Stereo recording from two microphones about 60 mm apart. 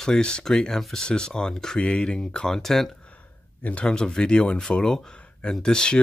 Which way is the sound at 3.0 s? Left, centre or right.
Left.